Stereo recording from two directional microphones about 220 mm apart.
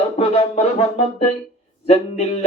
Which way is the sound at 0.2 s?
25° left (ahead or behind).